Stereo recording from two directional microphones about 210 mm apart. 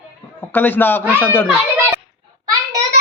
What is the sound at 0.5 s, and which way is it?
Speech, 10° left (ahead or behind).